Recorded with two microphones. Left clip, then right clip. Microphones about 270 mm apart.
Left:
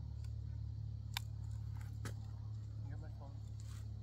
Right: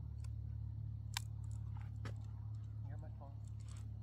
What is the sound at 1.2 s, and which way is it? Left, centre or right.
Biting, centre.